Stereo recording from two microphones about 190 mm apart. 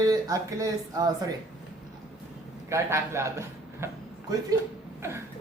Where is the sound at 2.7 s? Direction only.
15° right (ahead or behind).